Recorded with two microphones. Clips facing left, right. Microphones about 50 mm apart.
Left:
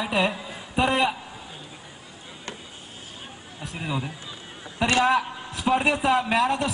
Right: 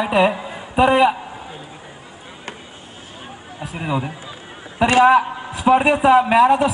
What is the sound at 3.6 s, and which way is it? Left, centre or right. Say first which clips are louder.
A man's voice: right 7 dB; centre.